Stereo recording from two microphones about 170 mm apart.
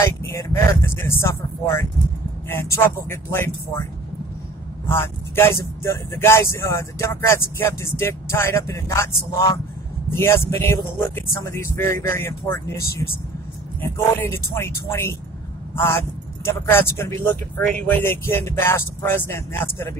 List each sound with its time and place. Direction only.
0.2 s speech: 15° left (ahead or behind)
4.8 s speech: 15° left (ahead or behind)
10.1 s speech: 15° left (ahead or behind)
13.7 s speech: 15° left (ahead or behind)